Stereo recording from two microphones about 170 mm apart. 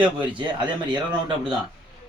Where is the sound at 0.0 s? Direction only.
25° right (ahead or behind).